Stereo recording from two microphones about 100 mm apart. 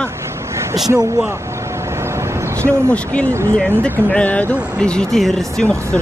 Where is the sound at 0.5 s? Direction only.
30° right (ahead or behind).